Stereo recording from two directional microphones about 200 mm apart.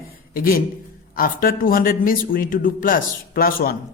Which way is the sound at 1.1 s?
45° left (ahead or behind).